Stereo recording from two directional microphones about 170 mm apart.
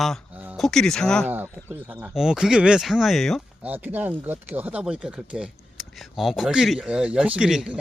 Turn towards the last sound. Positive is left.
turn(degrees=-5)  # may be behind; listen again after turning